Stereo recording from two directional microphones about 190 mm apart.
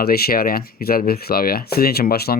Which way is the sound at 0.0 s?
55° left (ahead or behind).